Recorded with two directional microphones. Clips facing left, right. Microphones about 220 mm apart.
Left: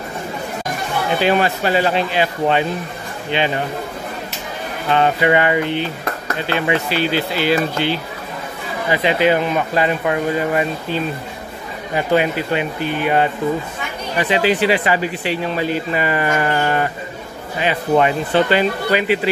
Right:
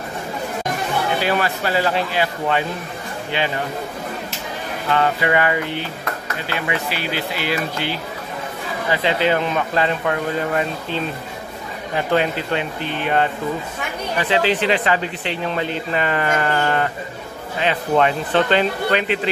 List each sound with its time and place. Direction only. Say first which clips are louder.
1.2 s speech: left 4 dB; 20° left (ahead or behind)
4.9 s speech: left 3 dB; 20° left (ahead or behind)
8.9 s speech: left 3 dB; 15° left (ahead or behind)